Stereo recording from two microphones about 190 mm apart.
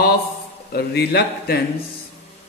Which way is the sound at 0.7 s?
55° left (ahead or behind).